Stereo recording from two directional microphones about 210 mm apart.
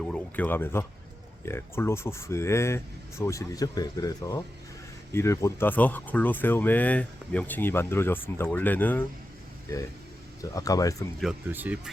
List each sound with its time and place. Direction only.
0.0 s speech: 5° left (ahead or behind)
10.5 s speech: 15° left (ahead or behind)
11.2 s speech: 5° right (ahead or behind)